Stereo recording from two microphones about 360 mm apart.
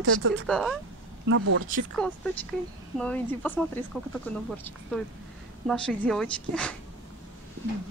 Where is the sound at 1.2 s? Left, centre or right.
Right.